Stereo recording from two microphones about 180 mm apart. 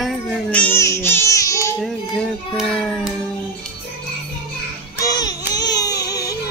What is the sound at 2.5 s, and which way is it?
Music, 5° left (ahead or behind).